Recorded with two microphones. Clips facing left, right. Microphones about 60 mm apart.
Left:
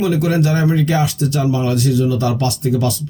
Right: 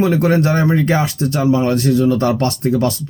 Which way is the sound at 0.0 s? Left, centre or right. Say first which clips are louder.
Right 2 dB; right.